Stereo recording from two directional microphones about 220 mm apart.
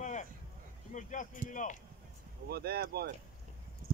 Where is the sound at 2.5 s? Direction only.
45° right (ahead or behind).